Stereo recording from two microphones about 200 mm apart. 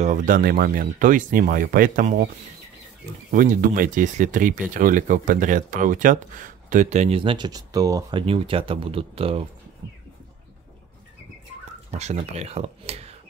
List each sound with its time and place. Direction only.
0.0 s speech: 40° right (ahead or behind)
3.3 s speech: 40° right (ahead or behind)
11.9 s speech: 35° right (ahead or behind)